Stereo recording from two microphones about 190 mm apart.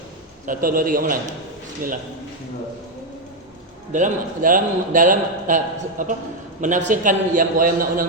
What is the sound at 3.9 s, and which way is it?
A man's voice, 45° right (ahead or behind).